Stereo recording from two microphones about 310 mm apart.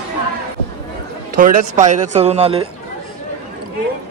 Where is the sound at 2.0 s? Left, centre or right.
Right.